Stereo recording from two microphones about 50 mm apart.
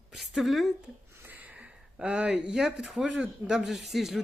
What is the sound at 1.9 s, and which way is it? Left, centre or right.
Speech, right.